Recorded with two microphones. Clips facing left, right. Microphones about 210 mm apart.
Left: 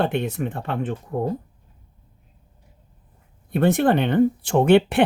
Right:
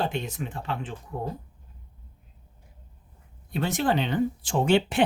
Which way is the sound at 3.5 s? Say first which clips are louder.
Left 7 dB; 55° left (ahead or behind).